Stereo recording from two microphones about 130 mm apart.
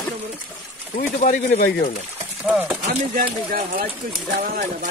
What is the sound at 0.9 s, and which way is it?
Speech, 75° left (ahead or behind).